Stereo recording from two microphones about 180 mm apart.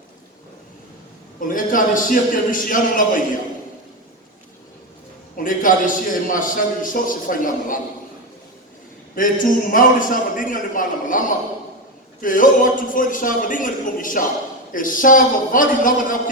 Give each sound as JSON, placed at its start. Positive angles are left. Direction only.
{"t": 1.4, "sound": "a man's voice", "side_deg": 50}
{"t": 5.4, "sound": "a man's voice", "side_deg": 50}
{"t": 9.1, "sound": "a man's voice", "side_deg": 50}